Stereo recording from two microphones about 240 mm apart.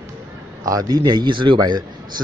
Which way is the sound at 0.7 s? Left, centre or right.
Centre.